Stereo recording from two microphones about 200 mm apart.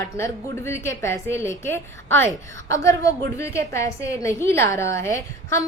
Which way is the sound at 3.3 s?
15° left (ahead or behind).